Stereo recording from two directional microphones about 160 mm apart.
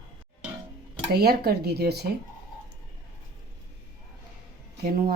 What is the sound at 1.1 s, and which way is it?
Speech, 80° right.